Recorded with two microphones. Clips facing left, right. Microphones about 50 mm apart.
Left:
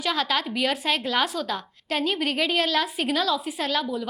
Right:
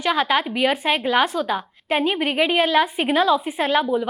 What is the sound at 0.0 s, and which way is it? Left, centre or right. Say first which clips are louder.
A woman's voice: right 5 dB; centre.